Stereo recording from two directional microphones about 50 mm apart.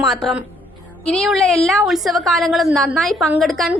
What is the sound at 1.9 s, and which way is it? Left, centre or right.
Speech, centre.